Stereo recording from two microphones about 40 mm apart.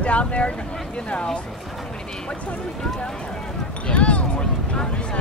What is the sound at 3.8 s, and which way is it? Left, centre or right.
Speech, left.